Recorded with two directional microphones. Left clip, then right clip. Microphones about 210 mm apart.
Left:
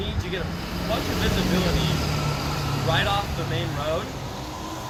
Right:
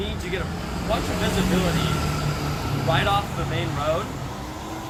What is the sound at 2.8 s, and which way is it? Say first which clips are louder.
Speech: right 2 dB; 10° left (ahead or behind).